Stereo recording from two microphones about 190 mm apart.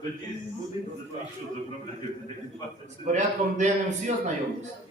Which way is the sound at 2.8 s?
40° right (ahead or behind).